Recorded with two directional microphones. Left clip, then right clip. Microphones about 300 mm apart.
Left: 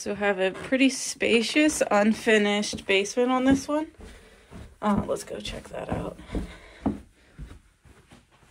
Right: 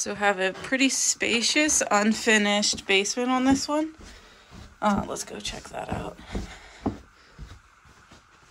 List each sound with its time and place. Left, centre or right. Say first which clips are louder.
0.0 s speech: right 1 dB; centre